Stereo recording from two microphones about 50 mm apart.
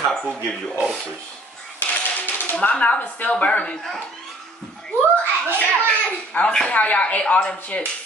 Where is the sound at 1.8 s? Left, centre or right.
Left.